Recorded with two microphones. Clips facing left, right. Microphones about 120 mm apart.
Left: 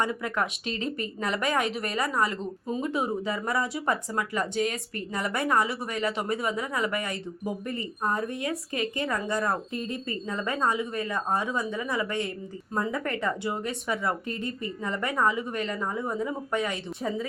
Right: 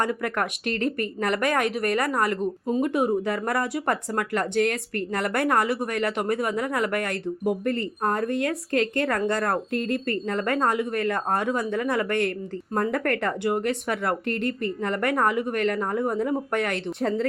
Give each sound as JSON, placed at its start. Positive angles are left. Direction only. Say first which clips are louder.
{"t": 0.0, "sound": "a woman's voice", "louder": "right 2 dB", "side_deg": -55}